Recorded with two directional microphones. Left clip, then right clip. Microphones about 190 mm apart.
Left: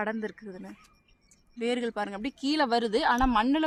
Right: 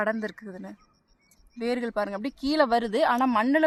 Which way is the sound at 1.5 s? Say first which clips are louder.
Right 1 dB; 40° right (ahead or behind).